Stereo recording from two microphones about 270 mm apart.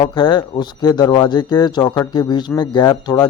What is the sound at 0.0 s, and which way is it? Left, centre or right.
Speech, centre.